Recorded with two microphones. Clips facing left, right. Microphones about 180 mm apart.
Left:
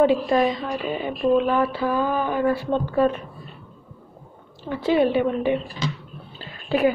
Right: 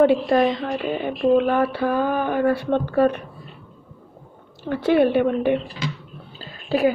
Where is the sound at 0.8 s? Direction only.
55° right (ahead or behind).